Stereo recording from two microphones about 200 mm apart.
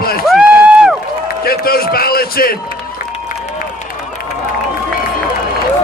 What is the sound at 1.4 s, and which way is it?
A man's voice, 50° left (ahead or behind).